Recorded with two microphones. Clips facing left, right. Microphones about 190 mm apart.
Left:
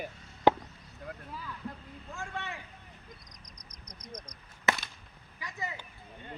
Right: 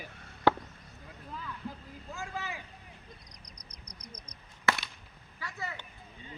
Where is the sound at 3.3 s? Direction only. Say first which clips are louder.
Even; 35° right (ahead or behind).